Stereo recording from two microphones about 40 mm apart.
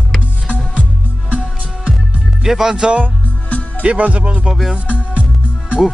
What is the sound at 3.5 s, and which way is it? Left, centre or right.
Music, left.